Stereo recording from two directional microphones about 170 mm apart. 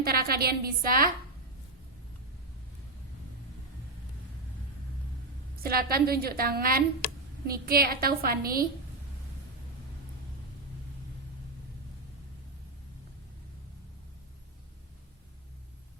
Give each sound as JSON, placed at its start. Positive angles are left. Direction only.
{"t": 0.0, "sound": "a woman's voice", "side_deg": -65}
{"t": 5.6, "sound": "a woman's voice", "side_deg": -60}